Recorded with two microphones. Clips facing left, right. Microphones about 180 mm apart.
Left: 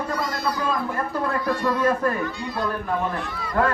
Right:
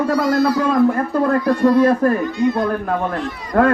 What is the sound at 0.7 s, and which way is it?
Speech, 50° right (ahead or behind).